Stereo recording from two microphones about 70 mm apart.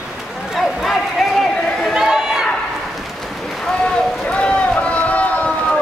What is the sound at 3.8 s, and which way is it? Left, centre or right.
Boat, centre.